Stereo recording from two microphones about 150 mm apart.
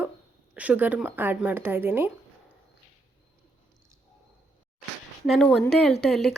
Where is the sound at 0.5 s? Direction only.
10° right (ahead or behind).